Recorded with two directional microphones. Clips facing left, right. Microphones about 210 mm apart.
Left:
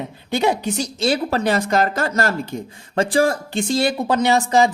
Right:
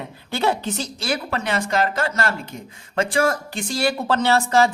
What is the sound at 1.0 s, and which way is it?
A woman's voice, 30° left (ahead or behind).